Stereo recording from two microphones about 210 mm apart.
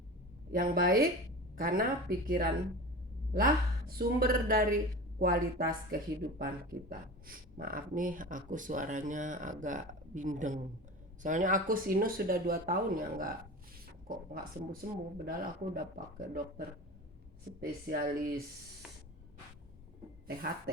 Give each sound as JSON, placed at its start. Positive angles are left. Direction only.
{"t": 0.5, "sound": "speech", "side_deg": -45}
{"t": 14.7, "sound": "speech", "side_deg": -45}